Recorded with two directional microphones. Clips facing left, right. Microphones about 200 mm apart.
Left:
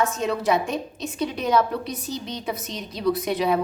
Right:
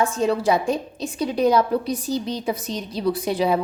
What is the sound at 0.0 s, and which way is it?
A woman's voice, 30° right (ahead or behind).